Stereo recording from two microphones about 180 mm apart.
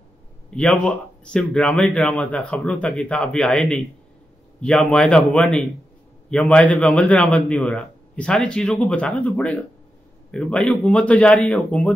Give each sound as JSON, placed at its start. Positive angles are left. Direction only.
{"t": 0.5, "sound": "a man's voice", "side_deg": 5}